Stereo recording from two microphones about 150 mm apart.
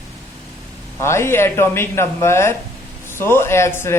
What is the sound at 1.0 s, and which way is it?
Speech, 15° left (ahead or behind).